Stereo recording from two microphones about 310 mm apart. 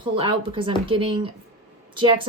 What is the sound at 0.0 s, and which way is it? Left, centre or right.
Speech, centre.